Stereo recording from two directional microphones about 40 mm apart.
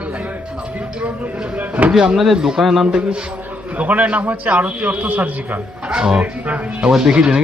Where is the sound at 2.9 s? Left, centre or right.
Right.